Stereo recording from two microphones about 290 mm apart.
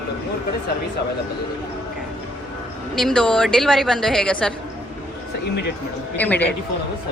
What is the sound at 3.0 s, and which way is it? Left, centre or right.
A woman's voice, centre.